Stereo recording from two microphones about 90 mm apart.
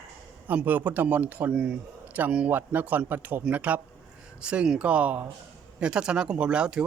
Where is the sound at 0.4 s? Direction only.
20° right (ahead or behind).